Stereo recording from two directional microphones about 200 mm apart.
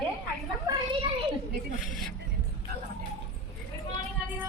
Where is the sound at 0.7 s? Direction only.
15° right (ahead or behind).